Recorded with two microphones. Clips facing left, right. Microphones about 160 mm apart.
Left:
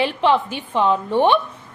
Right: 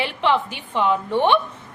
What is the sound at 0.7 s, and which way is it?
Speech, 15° left (ahead or behind).